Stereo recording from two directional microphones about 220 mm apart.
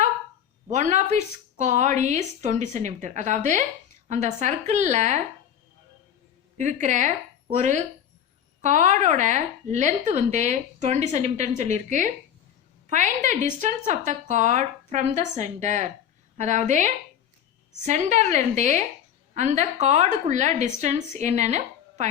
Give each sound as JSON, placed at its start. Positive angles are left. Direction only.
{"t": 0.7, "sound": "a woman's voice", "side_deg": -35}
{"t": 6.6, "sound": "a woman's voice", "side_deg": -35}